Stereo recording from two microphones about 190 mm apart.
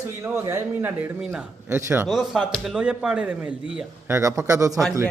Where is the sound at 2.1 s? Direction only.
Centre (ahead or behind).